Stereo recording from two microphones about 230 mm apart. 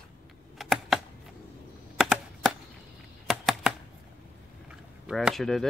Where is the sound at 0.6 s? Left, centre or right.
Centre.